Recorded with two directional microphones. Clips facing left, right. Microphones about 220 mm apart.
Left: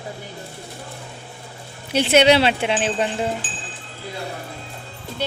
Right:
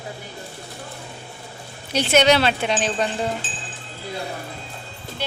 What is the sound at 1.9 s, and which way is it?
Speech, 30° left (ahead or behind).